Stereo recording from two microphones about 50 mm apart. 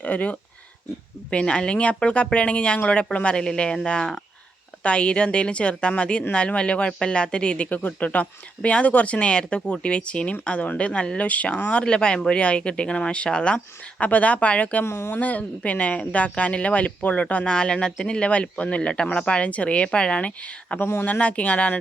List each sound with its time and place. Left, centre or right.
0.0 s speech: left
7.7 s speech: left
14.0 s speech: left
14.8 s speech: left
15.1 s speech: left
17.5 s speech: centre
20.7 s speech: left
21.0 s speech: left